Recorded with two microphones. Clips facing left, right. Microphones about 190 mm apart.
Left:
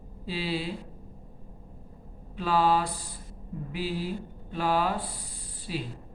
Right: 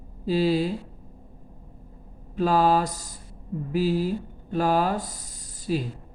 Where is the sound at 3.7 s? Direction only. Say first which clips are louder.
Right 8 dB; 45° right (ahead or behind).